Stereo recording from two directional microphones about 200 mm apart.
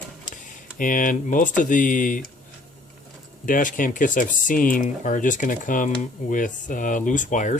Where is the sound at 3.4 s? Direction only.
40° left (ahead or behind).